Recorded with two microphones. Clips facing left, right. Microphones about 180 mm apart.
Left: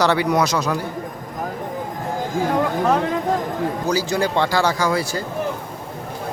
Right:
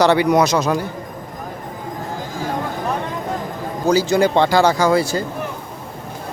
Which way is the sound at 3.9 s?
25° right (ahead or behind).